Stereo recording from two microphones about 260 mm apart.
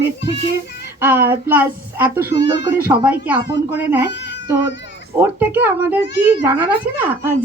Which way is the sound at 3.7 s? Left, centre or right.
Centre.